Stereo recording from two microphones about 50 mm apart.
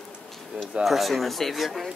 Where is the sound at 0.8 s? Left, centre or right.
Centre.